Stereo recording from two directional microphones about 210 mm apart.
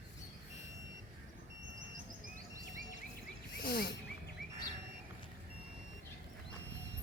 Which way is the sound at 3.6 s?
45° left (ahead or behind).